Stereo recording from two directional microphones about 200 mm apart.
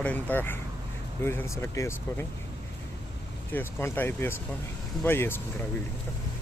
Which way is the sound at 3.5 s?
10° left (ahead or behind).